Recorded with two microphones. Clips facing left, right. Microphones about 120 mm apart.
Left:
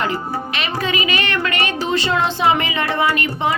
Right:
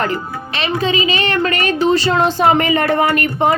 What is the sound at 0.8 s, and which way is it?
Speech, 30° right (ahead or behind).